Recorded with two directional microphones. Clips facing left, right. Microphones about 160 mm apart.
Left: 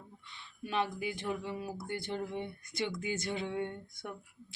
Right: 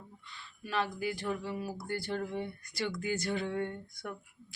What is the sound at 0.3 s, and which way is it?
Speech, 20° left (ahead or behind).